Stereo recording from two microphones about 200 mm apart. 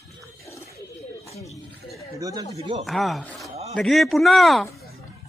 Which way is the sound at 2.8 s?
Centre (ahead or behind).